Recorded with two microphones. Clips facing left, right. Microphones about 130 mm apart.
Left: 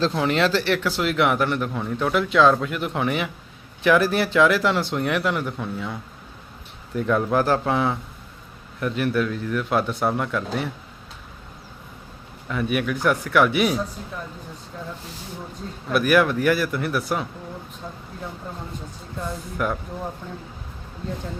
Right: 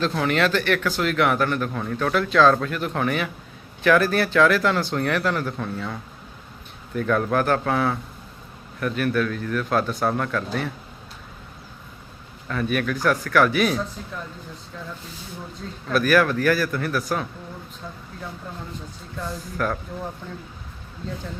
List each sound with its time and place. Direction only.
0.0 s a man's voice: 25° left (ahead or behind)
12.5 s a man's voice: 15° left (ahead or behind)
15.9 s speech: 20° left (ahead or behind)
19.5 s a man's voice: 15° left (ahead or behind)